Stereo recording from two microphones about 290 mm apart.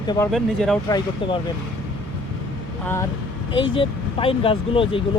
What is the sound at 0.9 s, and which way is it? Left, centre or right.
Speech, centre.